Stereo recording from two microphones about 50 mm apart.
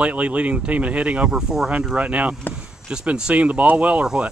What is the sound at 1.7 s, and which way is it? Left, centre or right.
Speech, right.